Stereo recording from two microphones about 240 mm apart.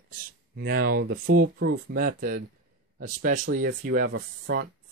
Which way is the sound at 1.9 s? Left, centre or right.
Right.